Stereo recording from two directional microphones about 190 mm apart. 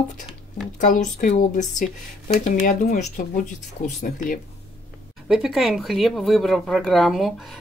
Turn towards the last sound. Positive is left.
turn(degrees=0)  # may be behind; listen again after turning